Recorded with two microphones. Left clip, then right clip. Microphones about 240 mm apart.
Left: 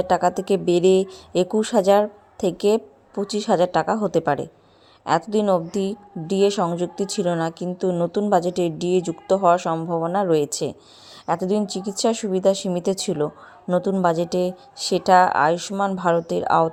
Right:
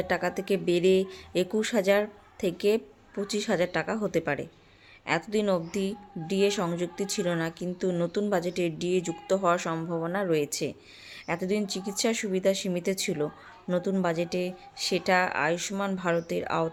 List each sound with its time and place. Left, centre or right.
0.0 s a woman's voice: centre